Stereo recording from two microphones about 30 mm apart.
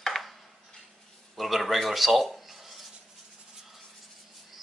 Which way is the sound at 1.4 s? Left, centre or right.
Centre.